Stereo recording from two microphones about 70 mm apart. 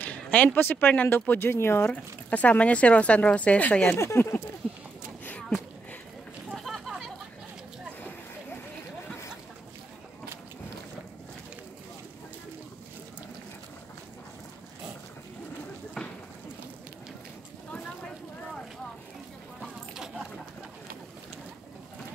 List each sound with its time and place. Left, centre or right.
0.0 s a sound: left
0.6 s speech: left
2.2 s speech: left
3.9 s speech: left
6.5 s a sound: centre
17.7 s vehicle: centre